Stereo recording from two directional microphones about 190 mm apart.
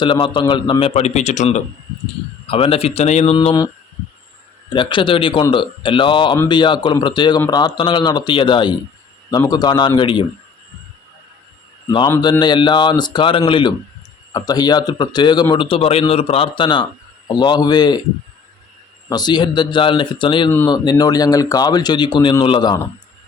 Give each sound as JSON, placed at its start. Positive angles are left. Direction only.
{"t": 0.0, "sound": "a man's voice", "side_deg": 25}
{"t": 3.3, "sound": "a man's voice", "side_deg": 20}
{"t": 4.7, "sound": "a man's voice", "side_deg": 25}
{"t": 11.9, "sound": "a man's voice", "side_deg": 20}
{"t": 19.0, "sound": "a man's voice", "side_deg": 20}